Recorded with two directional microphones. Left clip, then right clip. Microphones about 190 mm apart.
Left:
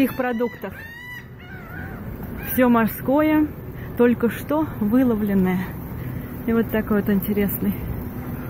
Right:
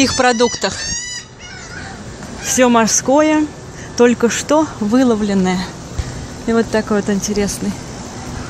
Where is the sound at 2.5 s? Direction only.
15° right (ahead or behind).